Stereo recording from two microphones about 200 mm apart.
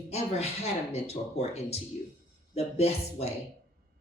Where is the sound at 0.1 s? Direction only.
30° left (ahead or behind).